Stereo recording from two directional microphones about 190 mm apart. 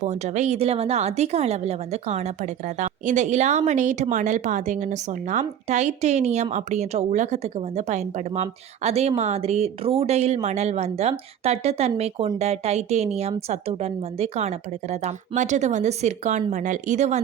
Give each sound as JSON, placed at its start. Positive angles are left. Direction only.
{"t": 0.0, "sound": "a woman's voice", "side_deg": -35}